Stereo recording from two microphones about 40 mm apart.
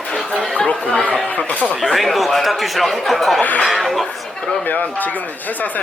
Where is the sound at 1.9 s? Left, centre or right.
Centre.